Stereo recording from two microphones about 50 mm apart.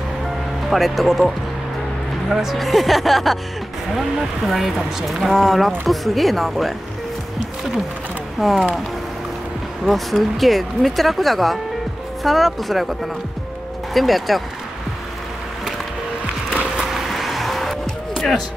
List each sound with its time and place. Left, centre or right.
0.7 s speech: centre
8.4 s speech: centre
9.8 s speech: centre
13.9 s speech: centre
16.9 s vehicle: centre